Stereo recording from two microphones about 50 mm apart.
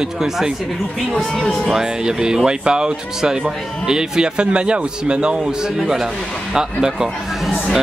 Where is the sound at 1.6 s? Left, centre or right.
Centre.